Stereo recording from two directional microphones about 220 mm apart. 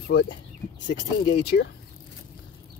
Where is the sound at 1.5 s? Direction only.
45° left (ahead or behind).